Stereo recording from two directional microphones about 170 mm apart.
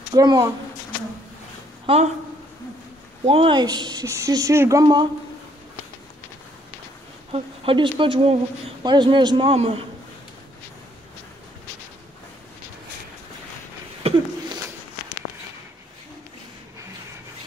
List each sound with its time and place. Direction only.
0.1 s a woman's voice: 25° right (ahead or behind)
1.9 s speech: 35° right (ahead or behind)
3.3 s a woman's voice: 30° right (ahead or behind)
7.3 s a woman's voice: 30° right (ahead or behind)
14.0 s a sound: 35° right (ahead or behind)